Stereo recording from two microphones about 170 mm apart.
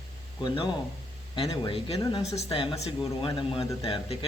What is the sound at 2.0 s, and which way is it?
Speech, 20° left (ahead or behind).